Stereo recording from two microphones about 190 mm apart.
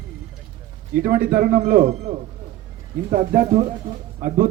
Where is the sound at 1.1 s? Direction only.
45° right (ahead or behind).